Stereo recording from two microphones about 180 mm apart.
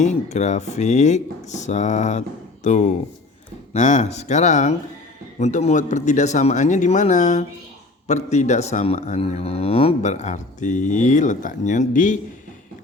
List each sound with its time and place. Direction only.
0.0 s speech: 40° left (ahead or behind)